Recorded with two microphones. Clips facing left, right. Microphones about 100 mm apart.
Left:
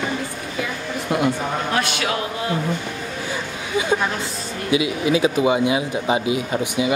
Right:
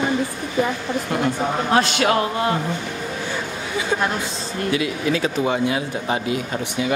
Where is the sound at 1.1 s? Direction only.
10° left (ahead or behind).